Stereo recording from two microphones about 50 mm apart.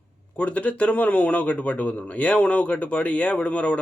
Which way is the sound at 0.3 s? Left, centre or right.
Left.